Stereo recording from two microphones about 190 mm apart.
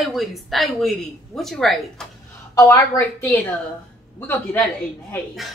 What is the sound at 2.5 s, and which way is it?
A woman's voice, 15° left (ahead or behind).